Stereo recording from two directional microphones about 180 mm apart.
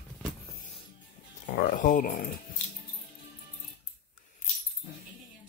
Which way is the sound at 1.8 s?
45° left (ahead or behind).